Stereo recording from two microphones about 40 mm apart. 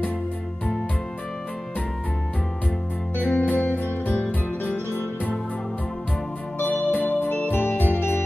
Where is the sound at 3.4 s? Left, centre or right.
Left.